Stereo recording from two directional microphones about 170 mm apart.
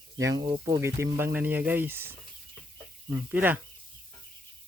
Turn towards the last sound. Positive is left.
turn(degrees=-10)  # may be behind; listen again after turning